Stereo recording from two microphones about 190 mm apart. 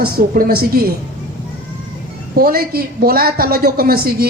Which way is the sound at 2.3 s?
55° right (ahead or behind).